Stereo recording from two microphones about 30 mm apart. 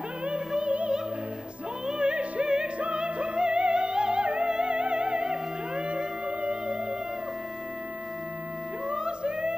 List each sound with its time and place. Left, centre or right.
0.7 s opera: right
1.9 s music: right
8.8 s music: right